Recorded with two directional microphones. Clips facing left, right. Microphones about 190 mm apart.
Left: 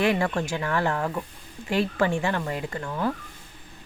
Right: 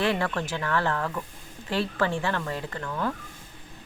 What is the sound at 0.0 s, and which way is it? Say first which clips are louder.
Speech: left 3 dB; 15° left (ahead or behind).